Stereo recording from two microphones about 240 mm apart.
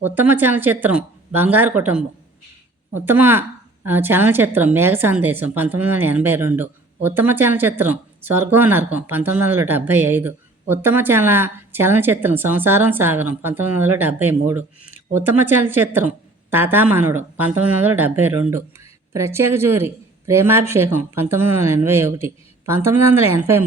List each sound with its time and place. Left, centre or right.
0.0 s a woman's voice: centre